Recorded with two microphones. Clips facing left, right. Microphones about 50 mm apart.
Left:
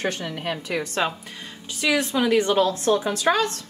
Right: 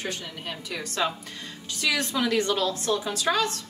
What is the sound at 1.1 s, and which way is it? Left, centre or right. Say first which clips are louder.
Speech: left 1 dB; centre.